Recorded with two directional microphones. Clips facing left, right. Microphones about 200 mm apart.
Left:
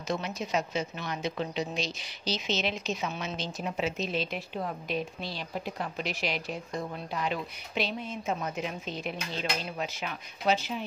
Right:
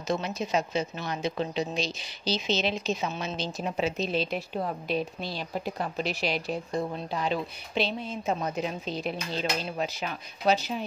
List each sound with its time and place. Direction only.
0.1 s a woman's voice: 30° right (ahead or behind)